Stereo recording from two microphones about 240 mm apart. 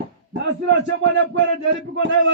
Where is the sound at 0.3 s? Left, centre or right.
Right.